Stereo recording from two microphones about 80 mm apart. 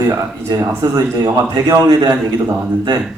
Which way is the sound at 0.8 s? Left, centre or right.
Right.